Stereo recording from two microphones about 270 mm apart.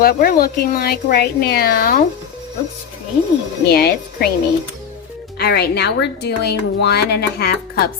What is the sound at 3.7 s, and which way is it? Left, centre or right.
Speech, left.